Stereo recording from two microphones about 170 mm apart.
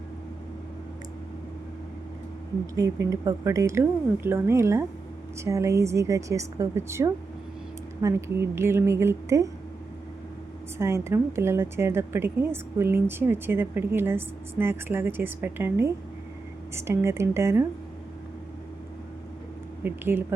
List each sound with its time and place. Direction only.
2.7 s a woman's voice: 20° right (ahead or behind)
10.8 s a woman's voice: 15° right (ahead or behind)
19.8 s a woman's voice: 15° right (ahead or behind)